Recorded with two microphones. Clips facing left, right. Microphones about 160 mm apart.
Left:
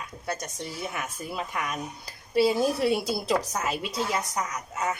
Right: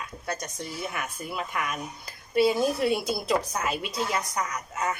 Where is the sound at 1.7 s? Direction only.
Centre (ahead or behind).